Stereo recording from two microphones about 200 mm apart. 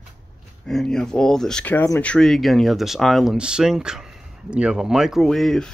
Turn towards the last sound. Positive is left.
turn(degrees=0)  # may be behind; listen again after turning